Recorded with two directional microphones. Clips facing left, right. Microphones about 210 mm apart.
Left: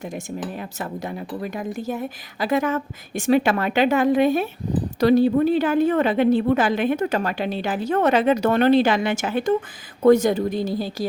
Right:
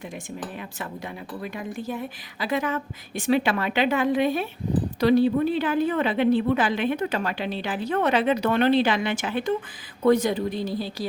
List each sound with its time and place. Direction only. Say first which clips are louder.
0.8 s a woman's voice: left 6 dB; 40° left (ahead or behind)